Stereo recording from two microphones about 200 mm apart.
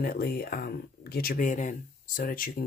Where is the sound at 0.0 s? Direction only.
45° left (ahead or behind).